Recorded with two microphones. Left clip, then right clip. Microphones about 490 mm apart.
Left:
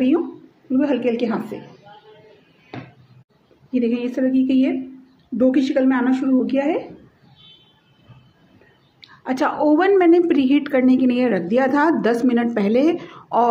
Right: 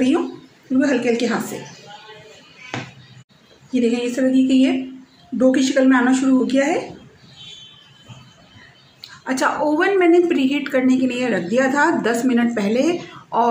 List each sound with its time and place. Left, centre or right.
0.7 s a woman's voice: left
3.7 s a woman's voice: left
9.2 s a woman's voice: left